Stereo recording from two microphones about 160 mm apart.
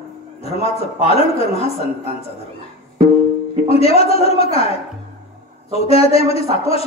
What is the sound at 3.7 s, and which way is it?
A man's voice, 40° left (ahead or behind).